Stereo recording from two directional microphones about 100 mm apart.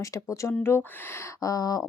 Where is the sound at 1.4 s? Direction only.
35° left (ahead or behind).